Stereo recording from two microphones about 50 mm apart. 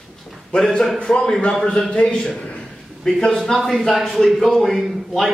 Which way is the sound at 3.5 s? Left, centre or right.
Centre.